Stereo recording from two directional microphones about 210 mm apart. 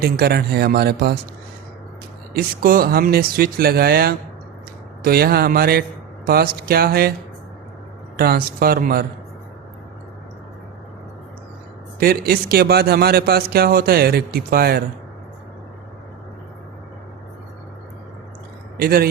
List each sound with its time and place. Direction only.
0.0 s a man's voice: 50° right (ahead or behind)
2.3 s a man's voice: 45° right (ahead or behind)
8.1 s a man's voice: 45° right (ahead or behind)
11.9 s a man's voice: 45° right (ahead or behind)
18.8 s a man's voice: 45° right (ahead or behind)